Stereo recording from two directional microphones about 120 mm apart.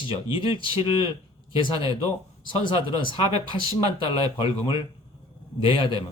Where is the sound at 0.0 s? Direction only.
45° left (ahead or behind).